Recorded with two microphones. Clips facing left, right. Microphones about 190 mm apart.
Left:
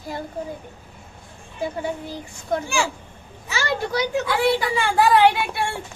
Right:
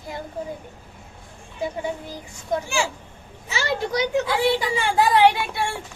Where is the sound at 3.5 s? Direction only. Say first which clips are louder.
Even; 20° right (ahead or behind).